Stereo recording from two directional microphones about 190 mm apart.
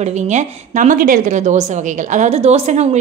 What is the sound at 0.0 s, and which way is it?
A woman's voice, 35° right (ahead or behind).